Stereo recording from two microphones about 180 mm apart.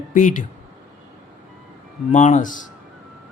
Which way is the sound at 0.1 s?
45° left (ahead or behind).